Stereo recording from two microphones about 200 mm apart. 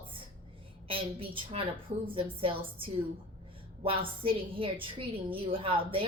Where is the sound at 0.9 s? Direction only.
25° right (ahead or behind).